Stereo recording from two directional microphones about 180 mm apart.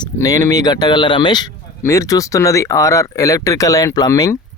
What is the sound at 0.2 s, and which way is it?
Speech, 20° left (ahead or behind).